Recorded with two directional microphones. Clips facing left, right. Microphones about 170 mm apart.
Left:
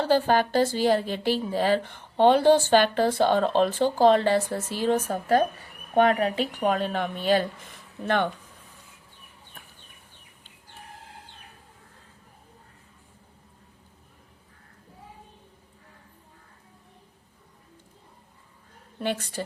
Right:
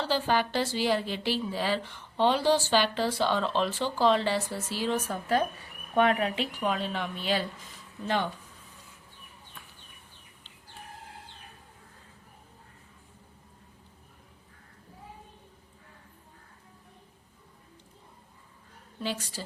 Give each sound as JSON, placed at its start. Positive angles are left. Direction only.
{"t": 0.0, "sound": "a woman's voice", "side_deg": 50}
{"t": 6.5, "sound": "a woman's voice", "side_deg": 50}
{"t": 8.0, "sound": "speech", "side_deg": 60}
{"t": 18.9, "sound": "a woman's voice", "side_deg": 60}